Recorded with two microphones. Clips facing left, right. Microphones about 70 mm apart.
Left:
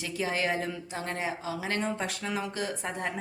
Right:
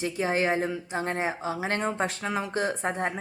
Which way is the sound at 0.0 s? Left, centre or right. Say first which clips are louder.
Right 4 dB; right.